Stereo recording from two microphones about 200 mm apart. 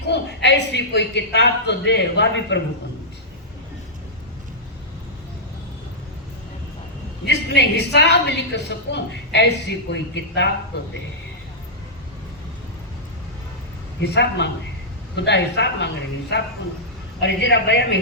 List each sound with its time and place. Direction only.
0.1 s a woman's voice: 60° left (ahead or behind)
7.3 s a woman's voice: 60° left (ahead or behind)
14.0 s a woman's voice: 60° left (ahead or behind)
17.2 s a woman's voice: 60° left (ahead or behind)